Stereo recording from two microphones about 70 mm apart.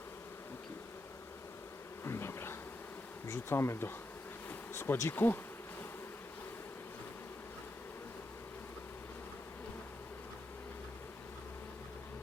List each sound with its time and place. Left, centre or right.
2.0 s bee: left